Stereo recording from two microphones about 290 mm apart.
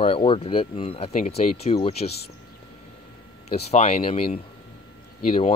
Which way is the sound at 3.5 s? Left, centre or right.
Left.